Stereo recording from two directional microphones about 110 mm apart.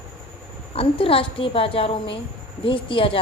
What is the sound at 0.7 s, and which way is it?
A woman's voice, 60° left (ahead or behind).